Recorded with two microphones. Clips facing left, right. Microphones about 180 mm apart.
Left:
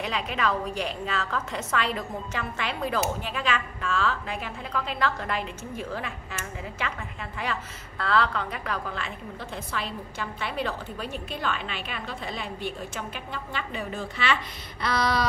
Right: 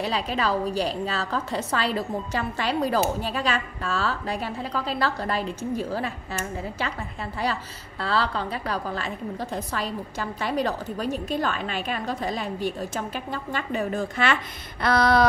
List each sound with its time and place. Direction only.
0.0 s a woman's voice: 35° right (ahead or behind); by 15.2 s 55° right (ahead or behind)